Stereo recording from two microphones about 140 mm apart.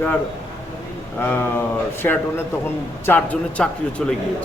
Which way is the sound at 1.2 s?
15° left (ahead or behind).